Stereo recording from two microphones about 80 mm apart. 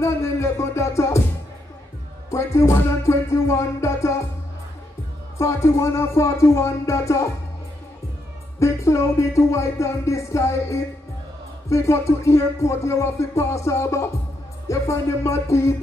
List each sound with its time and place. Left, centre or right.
0.0 s music: left
2.3 s music: left
5.4 s music: left
8.5 s music: left